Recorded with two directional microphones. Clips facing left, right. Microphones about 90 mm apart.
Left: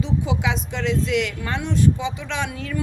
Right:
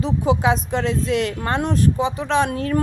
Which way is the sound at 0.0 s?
40° right (ahead or behind).